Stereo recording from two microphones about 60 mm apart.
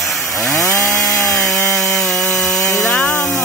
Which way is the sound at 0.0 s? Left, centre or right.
Centre.